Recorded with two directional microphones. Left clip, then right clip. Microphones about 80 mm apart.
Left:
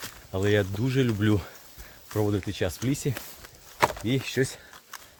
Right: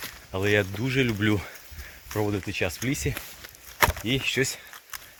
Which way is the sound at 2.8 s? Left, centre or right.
Centre.